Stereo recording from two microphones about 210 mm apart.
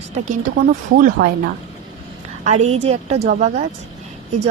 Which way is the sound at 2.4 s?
30° right (ahead or behind).